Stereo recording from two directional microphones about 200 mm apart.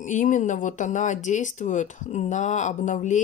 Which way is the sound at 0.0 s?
40° left (ahead or behind).